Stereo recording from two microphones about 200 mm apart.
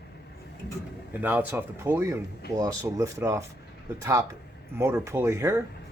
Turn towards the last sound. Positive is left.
turn(degrees=-15)  # may be behind; listen again after turning